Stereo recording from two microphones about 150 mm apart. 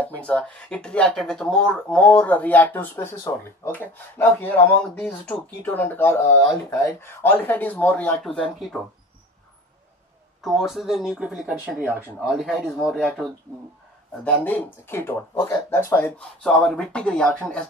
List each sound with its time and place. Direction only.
0.0 s speech: 10° left (ahead or behind)
10.4 s speech: centre (ahead or behind)
14.2 s speech: 10° left (ahead or behind)